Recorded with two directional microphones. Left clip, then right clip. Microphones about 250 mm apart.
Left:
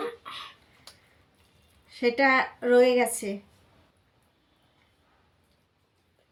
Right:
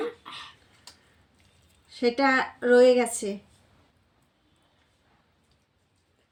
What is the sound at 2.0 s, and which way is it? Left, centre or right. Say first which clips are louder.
Speech: left 1 dB; centre.